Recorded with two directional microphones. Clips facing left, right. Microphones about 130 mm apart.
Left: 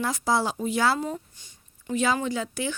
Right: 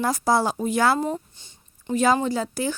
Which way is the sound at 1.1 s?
30° right (ahead or behind).